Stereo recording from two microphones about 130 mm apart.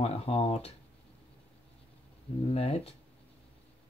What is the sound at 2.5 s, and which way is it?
Speech, 50° left (ahead or behind).